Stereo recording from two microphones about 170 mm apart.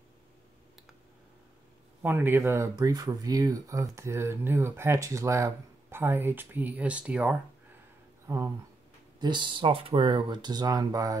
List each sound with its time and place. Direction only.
2.0 s speech: 10° right (ahead or behind)
9.2 s speech: 25° right (ahead or behind)